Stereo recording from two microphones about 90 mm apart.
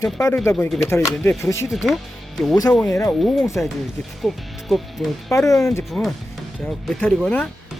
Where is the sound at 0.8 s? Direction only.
30° left (ahead or behind).